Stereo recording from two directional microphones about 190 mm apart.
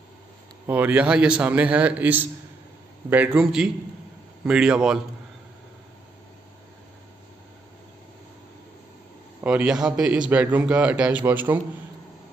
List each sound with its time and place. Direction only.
0.7 s a man's voice: 10° right (ahead or behind)
9.4 s a man's voice: 5° right (ahead or behind)